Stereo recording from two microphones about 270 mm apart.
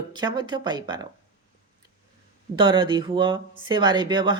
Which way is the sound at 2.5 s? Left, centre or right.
Centre.